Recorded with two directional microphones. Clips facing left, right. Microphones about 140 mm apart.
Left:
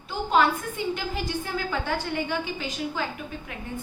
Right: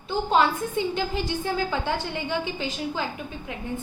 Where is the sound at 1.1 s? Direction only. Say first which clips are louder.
Right 3 dB; 25° right (ahead or behind).